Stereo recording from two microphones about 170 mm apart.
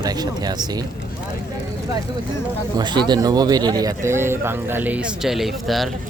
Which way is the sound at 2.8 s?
25° right (ahead or behind).